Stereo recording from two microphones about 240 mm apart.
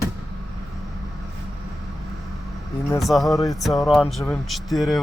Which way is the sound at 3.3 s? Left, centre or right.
Centre.